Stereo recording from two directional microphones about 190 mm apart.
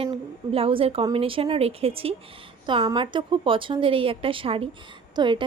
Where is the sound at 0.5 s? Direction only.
30° right (ahead or behind).